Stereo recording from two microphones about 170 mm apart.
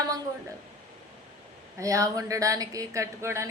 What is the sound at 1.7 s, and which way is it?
Speech, 20° right (ahead or behind).